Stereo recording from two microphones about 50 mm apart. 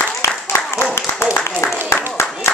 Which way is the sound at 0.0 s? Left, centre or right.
Left.